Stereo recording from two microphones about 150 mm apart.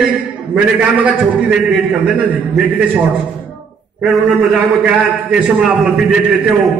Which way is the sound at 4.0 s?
Centre (ahead or behind).